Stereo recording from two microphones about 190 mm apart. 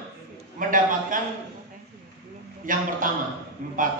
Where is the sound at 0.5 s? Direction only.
45° right (ahead or behind).